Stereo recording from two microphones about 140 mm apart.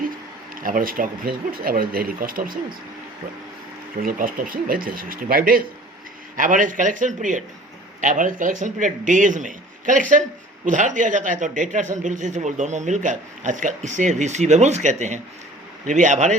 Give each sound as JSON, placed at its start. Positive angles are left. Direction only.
{"t": 0.5, "sound": "speech", "side_deg": -85}
{"t": 4.0, "sound": "speech", "side_deg": -90}
{"t": 6.3, "sound": "a man's voice", "side_deg": -70}